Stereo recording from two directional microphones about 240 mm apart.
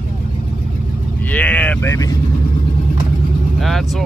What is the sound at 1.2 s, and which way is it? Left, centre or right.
Speech, centre.